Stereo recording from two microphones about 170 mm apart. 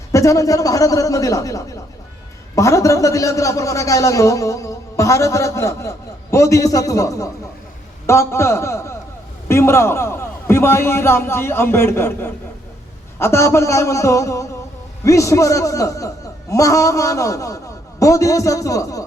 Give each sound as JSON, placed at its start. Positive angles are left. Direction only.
{"t": 0.1, "sound": "a man's voice", "side_deg": 20}